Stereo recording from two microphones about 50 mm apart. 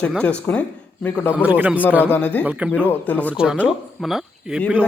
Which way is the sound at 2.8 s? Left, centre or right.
Left.